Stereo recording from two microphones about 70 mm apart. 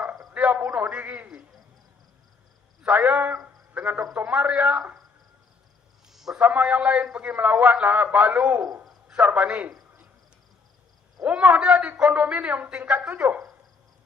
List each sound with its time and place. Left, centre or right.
0.3 s a man's voice: right
2.8 s a man's voice: right
6.1 s a sound: centre
6.4 s a man's voice: right
8.7 s hoot: centre
9.1 s a man's voice: right
11.2 s a man's voice: right